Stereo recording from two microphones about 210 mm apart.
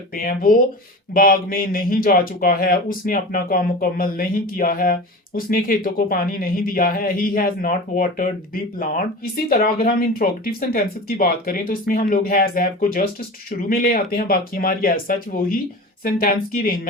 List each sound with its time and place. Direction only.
0.1 s speech: 45° left (ahead or behind)